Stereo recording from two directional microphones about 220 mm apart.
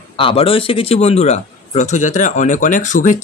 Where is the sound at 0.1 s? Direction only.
25° left (ahead or behind).